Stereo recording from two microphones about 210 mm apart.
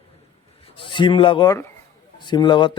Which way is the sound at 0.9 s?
25° left (ahead or behind).